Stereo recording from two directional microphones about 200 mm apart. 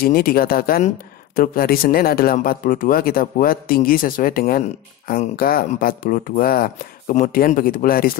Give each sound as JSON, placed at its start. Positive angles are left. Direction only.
{"t": 0.0, "sound": "speech", "side_deg": 50}